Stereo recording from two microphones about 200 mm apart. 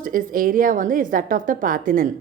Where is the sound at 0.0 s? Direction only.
45° right (ahead or behind).